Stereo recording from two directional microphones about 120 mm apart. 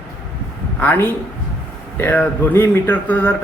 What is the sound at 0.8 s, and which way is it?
Speech, 15° left (ahead or behind).